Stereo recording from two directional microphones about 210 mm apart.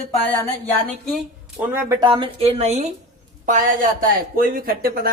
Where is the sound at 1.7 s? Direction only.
20° right (ahead or behind).